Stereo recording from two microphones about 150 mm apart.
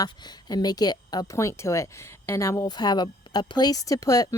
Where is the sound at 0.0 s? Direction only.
30° left (ahead or behind).